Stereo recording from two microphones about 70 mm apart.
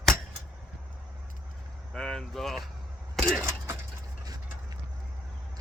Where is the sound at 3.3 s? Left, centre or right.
Right.